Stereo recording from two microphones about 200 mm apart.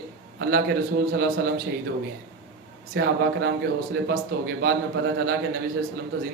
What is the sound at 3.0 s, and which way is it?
A man's voice, 60° right (ahead or behind).